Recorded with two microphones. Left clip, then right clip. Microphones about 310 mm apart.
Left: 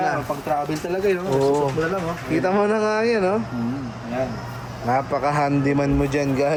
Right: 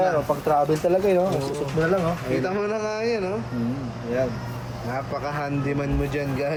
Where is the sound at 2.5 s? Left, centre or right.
Left.